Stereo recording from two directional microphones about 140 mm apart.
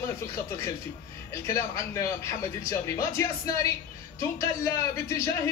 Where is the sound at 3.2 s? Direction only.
25° left (ahead or behind).